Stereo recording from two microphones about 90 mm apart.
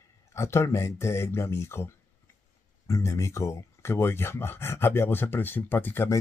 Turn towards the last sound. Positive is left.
turn(degrees=25)  # may be behind; listen again after turning